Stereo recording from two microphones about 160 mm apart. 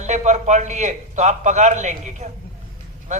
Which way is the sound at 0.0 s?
45° right (ahead or behind).